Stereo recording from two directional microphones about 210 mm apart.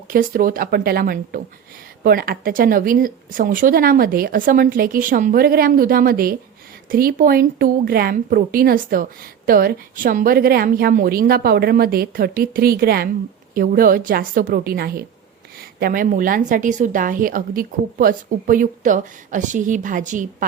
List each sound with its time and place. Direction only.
0.1 s a woman's voice: 40° right (ahead or behind)